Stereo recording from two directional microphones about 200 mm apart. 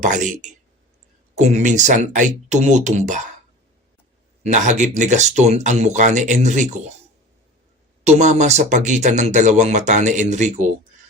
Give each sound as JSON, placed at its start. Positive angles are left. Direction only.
{"t": 0.0, "sound": "speech", "side_deg": -40}
{"t": 4.4, "sound": "speech", "side_deg": -35}
{"t": 8.0, "sound": "speech", "side_deg": -35}